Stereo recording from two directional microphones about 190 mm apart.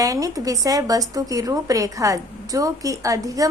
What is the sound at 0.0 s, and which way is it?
A woman's voice, 20° right (ahead or behind).